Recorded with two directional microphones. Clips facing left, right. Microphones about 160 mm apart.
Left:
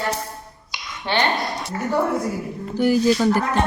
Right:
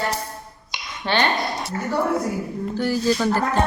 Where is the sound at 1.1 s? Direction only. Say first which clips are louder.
Even; 20° left (ahead or behind).